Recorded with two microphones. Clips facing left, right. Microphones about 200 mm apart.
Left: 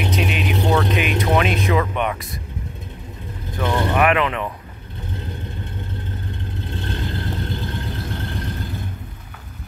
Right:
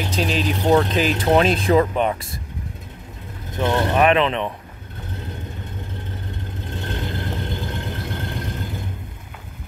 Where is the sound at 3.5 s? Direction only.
15° right (ahead or behind).